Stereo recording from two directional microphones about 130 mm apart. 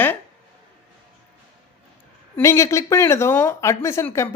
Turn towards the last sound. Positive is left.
turn(degrees=20)  # may be behind; listen again after turning